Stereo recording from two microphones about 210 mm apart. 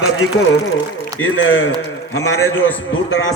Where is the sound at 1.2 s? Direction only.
70° left (ahead or behind).